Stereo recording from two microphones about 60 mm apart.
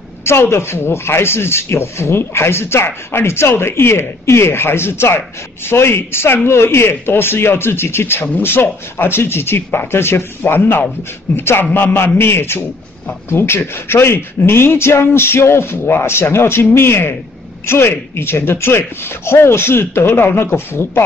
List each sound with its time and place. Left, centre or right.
0.2 s speech: left